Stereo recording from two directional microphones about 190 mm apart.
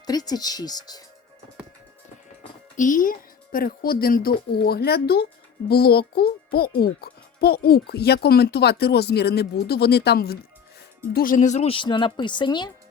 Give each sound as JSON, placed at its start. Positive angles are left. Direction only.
{"t": 0.0, "sound": "speech", "side_deg": 20}
{"t": 2.7, "sound": "a child's voice", "side_deg": 45}